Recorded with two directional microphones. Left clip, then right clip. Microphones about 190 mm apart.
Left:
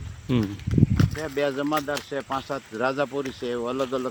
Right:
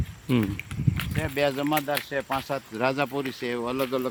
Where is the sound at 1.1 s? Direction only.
60° right (ahead or behind).